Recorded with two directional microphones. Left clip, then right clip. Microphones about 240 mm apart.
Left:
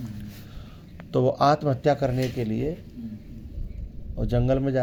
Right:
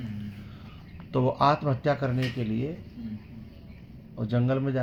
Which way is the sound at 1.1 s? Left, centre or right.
Left.